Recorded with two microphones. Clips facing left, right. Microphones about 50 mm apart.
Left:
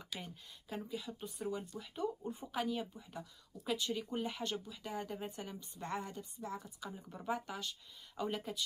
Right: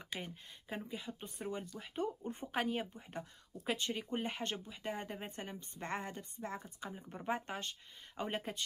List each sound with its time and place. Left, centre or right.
0.0 s speech: right
6.9 s speech: right